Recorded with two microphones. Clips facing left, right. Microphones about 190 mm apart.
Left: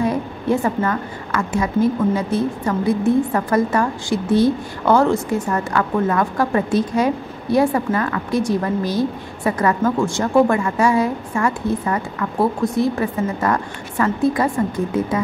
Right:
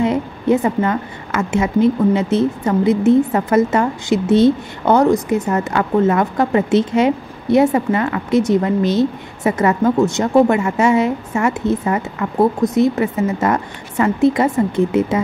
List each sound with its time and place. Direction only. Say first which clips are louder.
0.0 s a woman's voice: right 3 dB; 20° right (ahead or behind)